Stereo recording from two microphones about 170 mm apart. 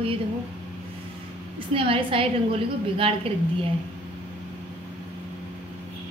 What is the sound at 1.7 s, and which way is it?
A woman's voice, 30° right (ahead or behind).